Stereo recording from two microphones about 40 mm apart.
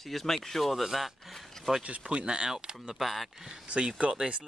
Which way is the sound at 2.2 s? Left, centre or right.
Centre.